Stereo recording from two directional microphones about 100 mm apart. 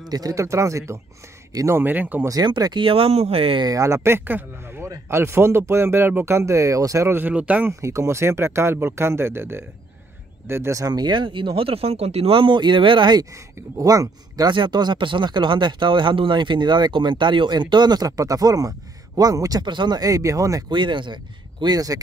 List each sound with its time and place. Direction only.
0.1 s speech: 35° right (ahead or behind)
1.8 s speech: 20° right (ahead or behind)
2.2 s speech: 45° right (ahead or behind)
2.9 s speech: 80° right
3.6 s speech: 35° right (ahead or behind); by 7.7 s 15° right (ahead or behind)
7.8 s speech: 30° right (ahead or behind); by 13.2 s 55° right (ahead or behind)
13.7 s speech: 35° right (ahead or behind)
14.5 s speech: 50° right (ahead or behind)
19.6 s speech: 50° right (ahead or behind); by 20.6 s 35° right (ahead or behind)
20.7 s speech: 55° right (ahead or behind)